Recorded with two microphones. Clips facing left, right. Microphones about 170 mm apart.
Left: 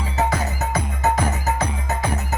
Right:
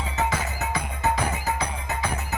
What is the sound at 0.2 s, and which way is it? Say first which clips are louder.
Music: left 5 dB; 40° left (ahead or behind).